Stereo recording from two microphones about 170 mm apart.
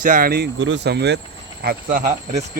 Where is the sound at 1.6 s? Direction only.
55° right (ahead or behind).